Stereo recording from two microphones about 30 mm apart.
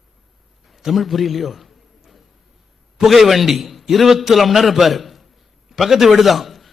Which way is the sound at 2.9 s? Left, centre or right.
Centre.